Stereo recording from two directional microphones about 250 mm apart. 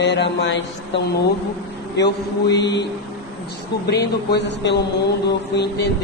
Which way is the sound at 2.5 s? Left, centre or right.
Left.